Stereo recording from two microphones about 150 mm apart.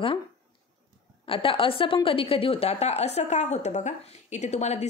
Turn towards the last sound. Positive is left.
turn(degrees=50)  # may be behind; listen again after turning